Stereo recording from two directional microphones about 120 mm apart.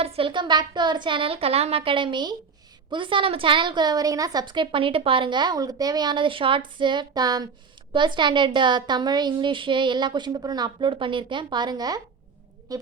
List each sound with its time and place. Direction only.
0.0 s a woman's voice: 50° right (ahead or behind); by 12.8 s 30° right (ahead or behind)